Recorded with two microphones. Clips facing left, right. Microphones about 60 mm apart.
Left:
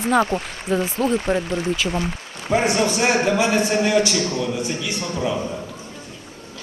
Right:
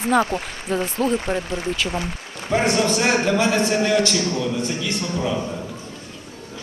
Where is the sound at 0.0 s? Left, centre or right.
Centre.